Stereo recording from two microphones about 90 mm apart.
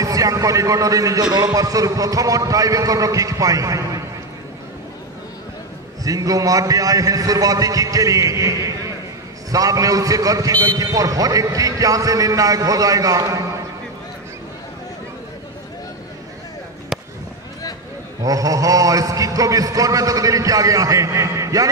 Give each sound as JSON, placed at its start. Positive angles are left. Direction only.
{"t": 0.0, "sound": "a man's voice", "side_deg": -40}
{"t": 6.0, "sound": "a man's voice", "side_deg": -40}
{"t": 18.2, "sound": "a man's voice", "side_deg": -40}